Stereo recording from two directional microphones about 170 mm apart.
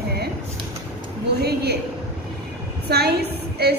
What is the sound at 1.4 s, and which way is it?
Speech, 70° right (ahead or behind).